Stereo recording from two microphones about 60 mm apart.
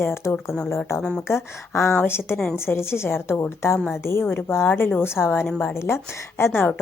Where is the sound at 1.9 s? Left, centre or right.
Left.